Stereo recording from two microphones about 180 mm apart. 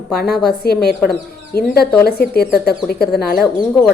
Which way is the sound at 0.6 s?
60° left (ahead or behind).